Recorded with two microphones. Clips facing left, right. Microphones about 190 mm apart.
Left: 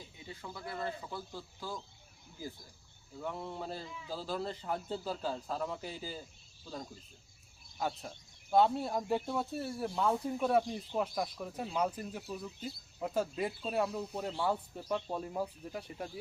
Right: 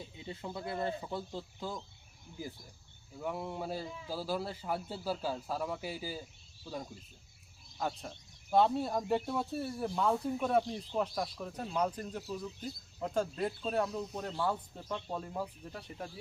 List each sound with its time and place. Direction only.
0.3 s speech: 25° right (ahead or behind)
3.2 s a man's voice: 10° right (ahead or behind)
7.8 s speech: centre (ahead or behind)